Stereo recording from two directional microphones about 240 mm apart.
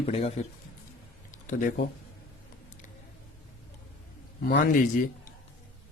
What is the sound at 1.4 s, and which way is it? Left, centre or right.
Speech, left.